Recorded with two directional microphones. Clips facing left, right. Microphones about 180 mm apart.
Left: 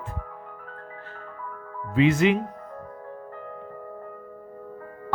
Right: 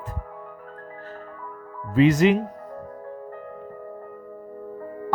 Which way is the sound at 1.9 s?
40° right (ahead or behind).